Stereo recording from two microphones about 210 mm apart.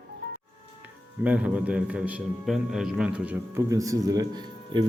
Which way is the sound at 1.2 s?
5° right (ahead or behind).